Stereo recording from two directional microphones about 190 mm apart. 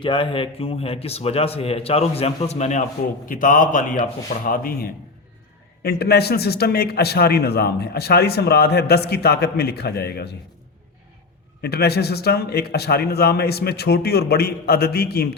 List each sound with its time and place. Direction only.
0.0 s a man's voice: 25° left (ahead or behind); by 10.3 s 55° left (ahead or behind)
11.6 s a man's voice: 55° left (ahead or behind)